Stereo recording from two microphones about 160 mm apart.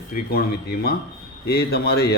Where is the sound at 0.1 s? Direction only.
75° left (ahead or behind).